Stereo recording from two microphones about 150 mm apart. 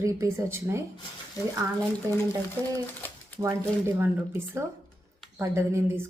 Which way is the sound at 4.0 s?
15° right (ahead or behind).